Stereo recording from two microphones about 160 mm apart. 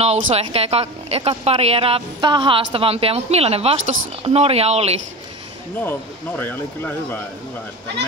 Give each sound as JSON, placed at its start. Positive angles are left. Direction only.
{"t": 0.0, "sound": "a woman's voice", "side_deg": -40}
{"t": 5.8, "sound": "speech", "side_deg": 10}